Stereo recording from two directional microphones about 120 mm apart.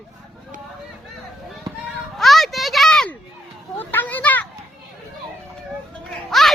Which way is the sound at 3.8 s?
15° left (ahead or behind).